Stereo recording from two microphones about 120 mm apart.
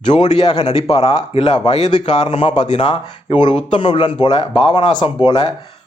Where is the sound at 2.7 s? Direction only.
45° left (ahead or behind).